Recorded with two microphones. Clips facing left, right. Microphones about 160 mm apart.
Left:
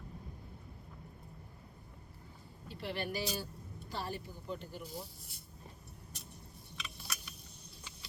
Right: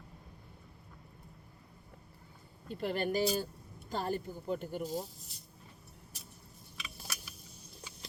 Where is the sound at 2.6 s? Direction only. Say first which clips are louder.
Right 6 dB; 50° right (ahead or behind).